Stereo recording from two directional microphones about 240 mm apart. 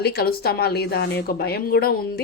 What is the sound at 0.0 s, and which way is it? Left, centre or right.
Speech, left.